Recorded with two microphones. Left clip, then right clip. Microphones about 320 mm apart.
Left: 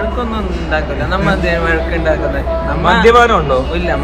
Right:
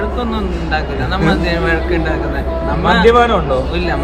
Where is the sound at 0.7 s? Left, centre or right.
Centre.